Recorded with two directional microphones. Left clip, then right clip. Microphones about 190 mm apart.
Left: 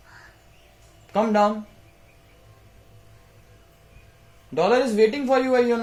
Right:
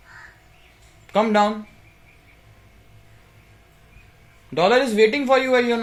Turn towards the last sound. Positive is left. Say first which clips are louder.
# right 2 dB
turn(degrees=-20)  # may be behind; listen again after turning